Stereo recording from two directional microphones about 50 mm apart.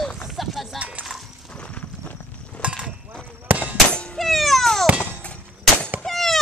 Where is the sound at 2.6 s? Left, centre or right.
Right.